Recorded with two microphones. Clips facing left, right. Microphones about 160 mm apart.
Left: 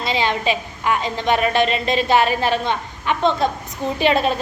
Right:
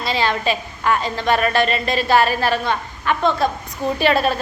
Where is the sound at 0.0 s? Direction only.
20° left (ahead or behind).